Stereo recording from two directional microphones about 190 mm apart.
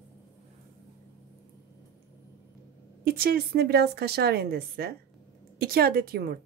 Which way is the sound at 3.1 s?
50° right (ahead or behind).